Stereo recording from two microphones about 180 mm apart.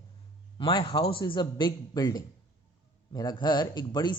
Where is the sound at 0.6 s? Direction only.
25° left (ahead or behind).